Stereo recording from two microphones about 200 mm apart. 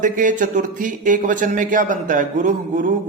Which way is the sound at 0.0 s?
40° right (ahead or behind).